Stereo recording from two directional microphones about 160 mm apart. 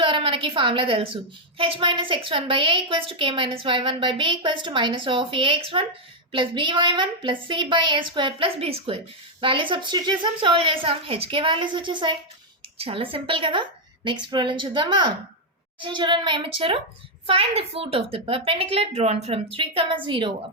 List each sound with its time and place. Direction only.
0.0 s a woman's voice: 35° right (ahead or behind)